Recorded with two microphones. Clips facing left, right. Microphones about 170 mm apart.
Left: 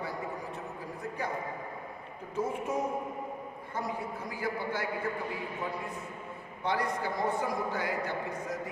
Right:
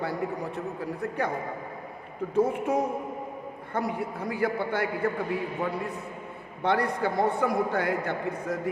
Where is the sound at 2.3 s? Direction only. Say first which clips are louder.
Right 7 dB; 65° right (ahead or behind).